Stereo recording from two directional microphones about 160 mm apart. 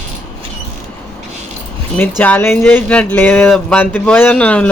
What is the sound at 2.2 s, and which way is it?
Speech, 10° left (ahead or behind).